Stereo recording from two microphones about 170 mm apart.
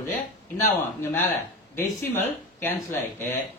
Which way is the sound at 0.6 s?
10° left (ahead or behind).